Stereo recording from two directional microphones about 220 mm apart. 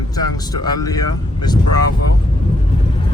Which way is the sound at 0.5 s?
15° left (ahead or behind).